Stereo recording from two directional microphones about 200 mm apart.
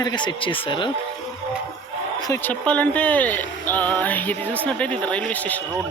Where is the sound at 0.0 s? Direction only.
20° left (ahead or behind).